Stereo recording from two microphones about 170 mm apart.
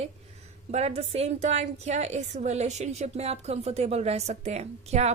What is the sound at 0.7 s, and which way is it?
A woman's voice, 40° right (ahead or behind).